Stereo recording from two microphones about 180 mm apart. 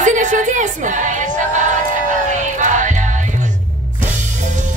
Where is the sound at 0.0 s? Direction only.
45° right (ahead or behind).